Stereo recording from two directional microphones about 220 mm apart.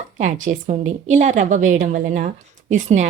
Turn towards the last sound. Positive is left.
turn(degrees=-35)  # may be behind; listen again after turning